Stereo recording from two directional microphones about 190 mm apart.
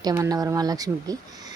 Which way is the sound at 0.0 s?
15° right (ahead or behind).